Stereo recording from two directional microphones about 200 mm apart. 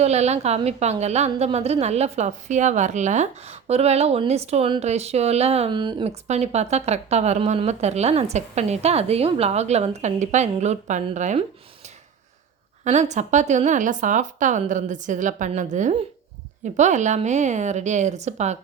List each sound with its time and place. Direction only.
0.0 s speech: 35° right (ahead or behind)
12.8 s speech: 35° right (ahead or behind)